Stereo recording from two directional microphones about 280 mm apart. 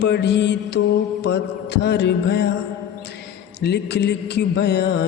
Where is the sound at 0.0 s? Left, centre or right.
Left.